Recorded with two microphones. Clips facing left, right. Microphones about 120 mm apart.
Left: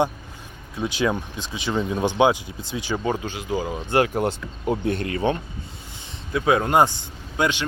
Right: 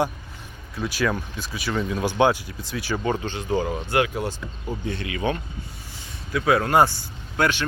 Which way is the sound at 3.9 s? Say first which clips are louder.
Left 5 dB; 35° left (ahead or behind).